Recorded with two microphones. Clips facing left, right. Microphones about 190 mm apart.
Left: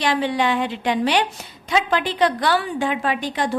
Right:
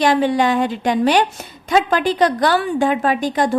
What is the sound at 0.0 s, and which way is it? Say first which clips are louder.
A woman's voice: right 5 dB; 45° right (ahead or behind).